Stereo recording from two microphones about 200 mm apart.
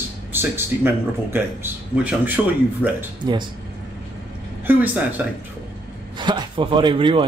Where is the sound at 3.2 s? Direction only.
25° right (ahead or behind).